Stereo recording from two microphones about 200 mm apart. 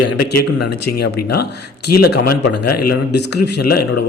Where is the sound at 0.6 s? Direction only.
55° left (ahead or behind).